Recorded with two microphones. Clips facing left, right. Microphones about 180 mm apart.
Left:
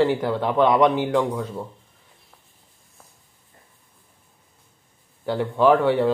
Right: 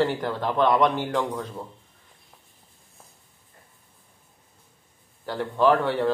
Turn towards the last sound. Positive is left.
turn(degrees=10)  # may be behind; listen again after turning